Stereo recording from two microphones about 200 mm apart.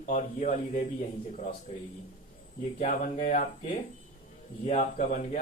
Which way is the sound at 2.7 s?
40° left (ahead or behind).